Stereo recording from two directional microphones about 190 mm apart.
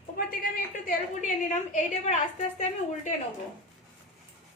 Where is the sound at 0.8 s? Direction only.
40° left (ahead or behind).